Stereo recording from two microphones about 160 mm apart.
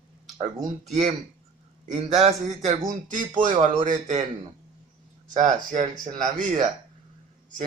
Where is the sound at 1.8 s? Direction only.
45° right (ahead or behind).